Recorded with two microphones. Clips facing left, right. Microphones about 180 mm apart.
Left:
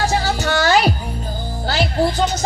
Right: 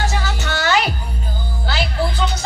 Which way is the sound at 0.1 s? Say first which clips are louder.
Left 5 dB; 40° left (ahead or behind).